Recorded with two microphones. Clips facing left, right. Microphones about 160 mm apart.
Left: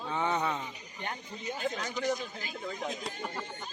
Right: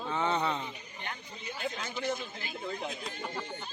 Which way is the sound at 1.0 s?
40° left (ahead or behind).